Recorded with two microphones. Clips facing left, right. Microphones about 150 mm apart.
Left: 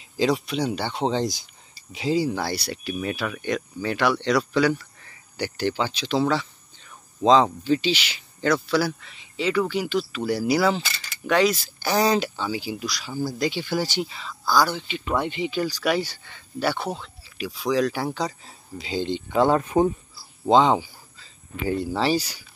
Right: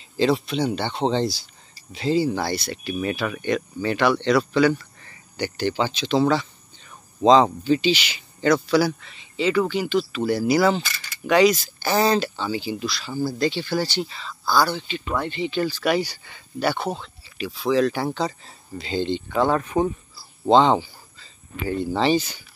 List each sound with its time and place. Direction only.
0.2 s speech: 5° left (ahead or behind)
12.1 s speech: 10° left (ahead or behind)
13.2 s speech: 5° right (ahead or behind)
13.5 s speech: 10° left (ahead or behind)
19.5 s speech: 30° left (ahead or behind)
20.4 s speech: 5° left (ahead or behind)